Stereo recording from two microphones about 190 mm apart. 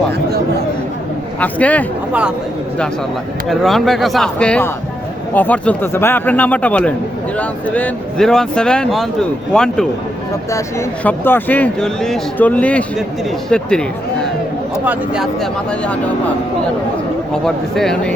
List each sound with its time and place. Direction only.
0.3 s a sound: 55° right (ahead or behind)
1.4 s speech: 5° left (ahead or behind)
3.5 s speech: centre (ahead or behind)
14.8 s speech: 5° right (ahead or behind)
17.4 s speech: centre (ahead or behind)